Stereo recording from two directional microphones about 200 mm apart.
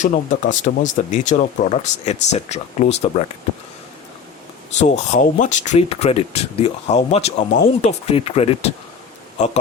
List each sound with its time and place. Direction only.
0.0 s speech: 40° left (ahead or behind)
4.8 s speech: 35° left (ahead or behind)